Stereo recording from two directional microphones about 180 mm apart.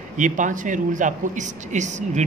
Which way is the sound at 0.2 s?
45° right (ahead or behind).